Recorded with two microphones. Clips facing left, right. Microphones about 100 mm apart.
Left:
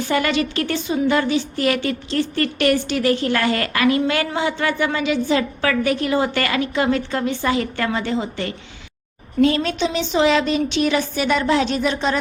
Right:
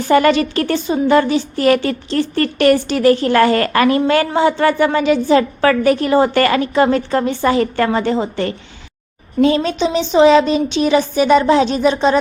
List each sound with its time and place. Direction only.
0.0 s a woman's voice: 40° right (ahead or behind)
9.4 s a woman's voice: 20° right (ahead or behind)